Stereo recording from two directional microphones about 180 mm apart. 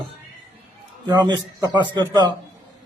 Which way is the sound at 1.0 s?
20° right (ahead or behind).